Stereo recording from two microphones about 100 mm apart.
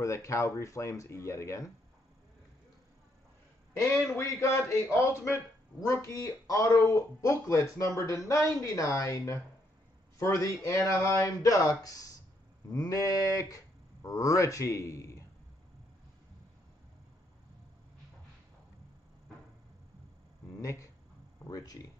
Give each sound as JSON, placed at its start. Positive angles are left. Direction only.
{"t": 0.0, "sound": "speech", "side_deg": 30}
{"t": 4.1, "sound": "a man's voice", "side_deg": 25}
{"t": 20.5, "sound": "a sound", "side_deg": 30}
{"t": 21.5, "sound": "speech", "side_deg": 35}